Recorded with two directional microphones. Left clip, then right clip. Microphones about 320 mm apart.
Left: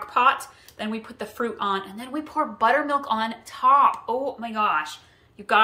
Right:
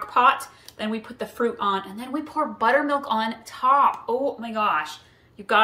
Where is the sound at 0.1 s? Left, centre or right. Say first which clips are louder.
Right 1 dB; centre.